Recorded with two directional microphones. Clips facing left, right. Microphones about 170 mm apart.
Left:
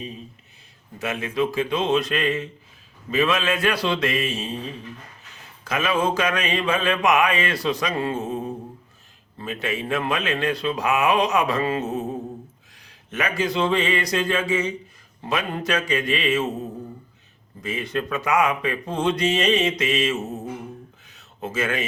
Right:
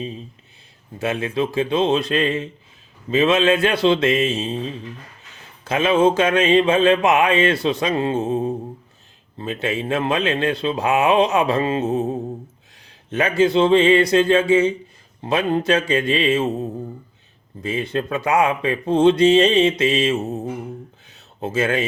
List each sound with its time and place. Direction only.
0.9 s mantra: 30° right (ahead or behind)
5.6 s mantra: 25° right (ahead or behind)
17.6 s mantra: 30° right (ahead or behind)
21.1 s a sound: 30° right (ahead or behind)